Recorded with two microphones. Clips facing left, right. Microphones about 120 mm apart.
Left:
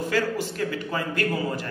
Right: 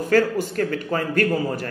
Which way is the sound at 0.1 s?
50° right (ahead or behind).